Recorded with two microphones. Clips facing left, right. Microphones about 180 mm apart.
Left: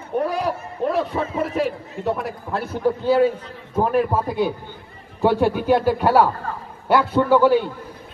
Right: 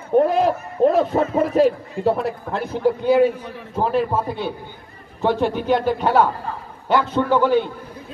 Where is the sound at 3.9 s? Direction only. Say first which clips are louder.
Even; 10° left (ahead or behind).